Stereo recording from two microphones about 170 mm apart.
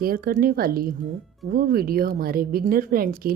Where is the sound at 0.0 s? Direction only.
60° right (ahead or behind).